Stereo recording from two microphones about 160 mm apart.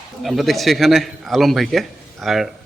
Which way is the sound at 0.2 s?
Centre (ahead or behind).